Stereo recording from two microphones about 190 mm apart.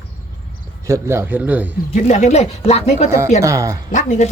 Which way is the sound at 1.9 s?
40° left (ahead or behind).